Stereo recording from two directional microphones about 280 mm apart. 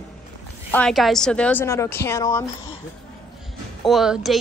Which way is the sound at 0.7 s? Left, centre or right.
Centre.